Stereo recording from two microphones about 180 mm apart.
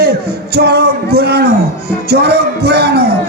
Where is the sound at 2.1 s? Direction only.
65° right (ahead or behind).